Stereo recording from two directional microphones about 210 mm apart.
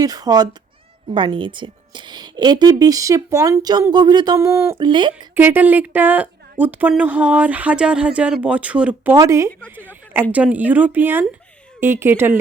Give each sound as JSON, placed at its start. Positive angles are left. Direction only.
{"t": 0.0, "sound": "a woman's voice", "side_deg": -20}
{"t": 5.3, "sound": "speech", "side_deg": -10}
{"t": 9.6, "sound": "a sound", "side_deg": -10}
{"t": 10.3, "sound": "speech", "side_deg": -5}